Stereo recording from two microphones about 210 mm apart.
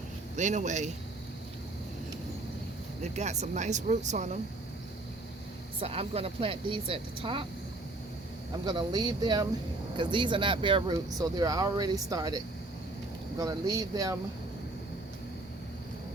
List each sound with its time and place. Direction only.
0.3 s speech: 35° right (ahead or behind)
3.0 s speech: 30° right (ahead or behind)
5.8 s speech: 30° right (ahead or behind)
8.6 s speech: 20° right (ahead or behind)
13.4 s speech: 15° right (ahead or behind)